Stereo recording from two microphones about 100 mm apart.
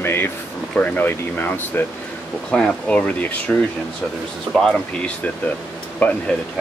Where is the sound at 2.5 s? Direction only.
10° left (ahead or behind).